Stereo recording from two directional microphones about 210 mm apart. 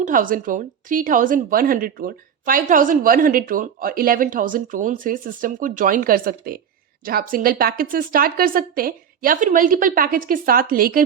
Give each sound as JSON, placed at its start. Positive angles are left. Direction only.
{"t": 0.0, "sound": "a woman's voice", "side_deg": -40}